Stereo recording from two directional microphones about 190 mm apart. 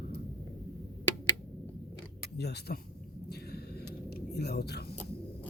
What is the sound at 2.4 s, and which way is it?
Speech, 60° left (ahead or behind).